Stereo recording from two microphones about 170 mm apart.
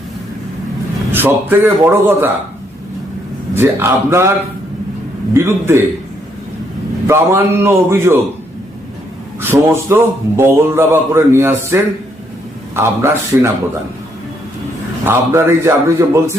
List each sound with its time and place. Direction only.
1.1 s a man's voice: 10° right (ahead or behind)
3.5 s a man's voice: 15° right (ahead or behind)
5.3 s a man's voice: 15° right (ahead or behind)
7.1 s a man's voice: 15° right (ahead or behind)
9.4 s a man's voice: 15° right (ahead or behind)
15.0 s a man's voice: 15° right (ahead or behind)